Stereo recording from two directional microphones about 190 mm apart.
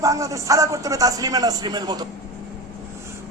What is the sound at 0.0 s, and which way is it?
Speech, 15° right (ahead or behind).